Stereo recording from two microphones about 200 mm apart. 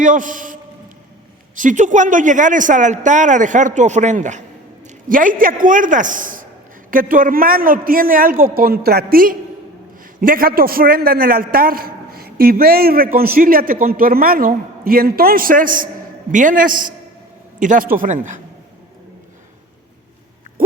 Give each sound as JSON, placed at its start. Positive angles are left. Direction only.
{"t": 0.0, "sound": "a man's voice", "side_deg": -40}